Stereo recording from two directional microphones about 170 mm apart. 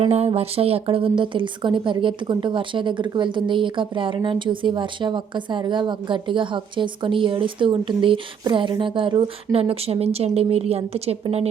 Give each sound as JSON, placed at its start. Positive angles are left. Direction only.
{"t": 0.0, "sound": "a woman's voice", "side_deg": -35}